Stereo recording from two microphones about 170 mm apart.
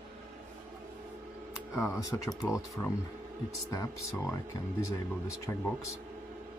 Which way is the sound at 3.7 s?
20° left (ahead or behind).